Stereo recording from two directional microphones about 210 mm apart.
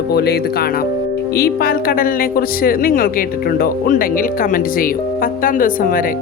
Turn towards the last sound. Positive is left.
turn(degrees=40)  # may be behind; listen again after turning